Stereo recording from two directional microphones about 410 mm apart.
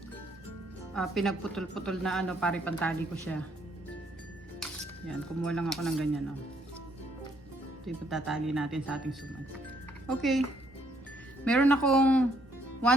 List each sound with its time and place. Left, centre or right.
0.9 s speech: centre
4.6 s speech: centre
7.9 s speech: centre
10.2 s speech: centre
11.4 s speech: centre